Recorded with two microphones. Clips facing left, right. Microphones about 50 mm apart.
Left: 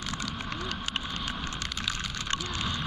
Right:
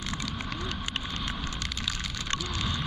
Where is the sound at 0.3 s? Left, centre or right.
Centre.